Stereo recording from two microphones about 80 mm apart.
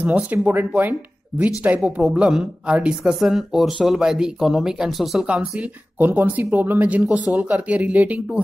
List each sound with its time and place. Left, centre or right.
0.0 s speech: centre
1.8 s speech: centre
5.9 s speech: right